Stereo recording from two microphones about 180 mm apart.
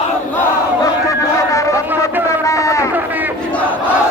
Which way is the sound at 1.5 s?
15° left (ahead or behind).